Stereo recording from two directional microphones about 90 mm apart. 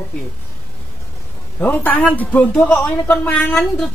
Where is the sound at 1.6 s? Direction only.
20° left (ahead or behind).